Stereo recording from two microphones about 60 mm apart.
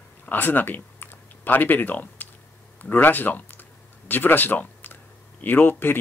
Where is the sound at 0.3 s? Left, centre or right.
Left.